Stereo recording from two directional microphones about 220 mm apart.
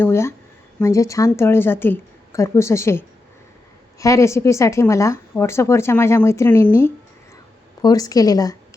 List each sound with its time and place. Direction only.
0.0 s speech: 10° left (ahead or behind)
4.0 s speech: 15° left (ahead or behind)
7.8 s speech: 15° left (ahead or behind)